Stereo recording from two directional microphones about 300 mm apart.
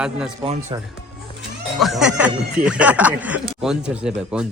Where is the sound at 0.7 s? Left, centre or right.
Centre.